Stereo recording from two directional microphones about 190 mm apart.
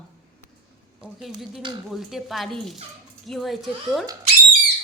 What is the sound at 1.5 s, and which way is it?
Speech, 25° right (ahead or behind).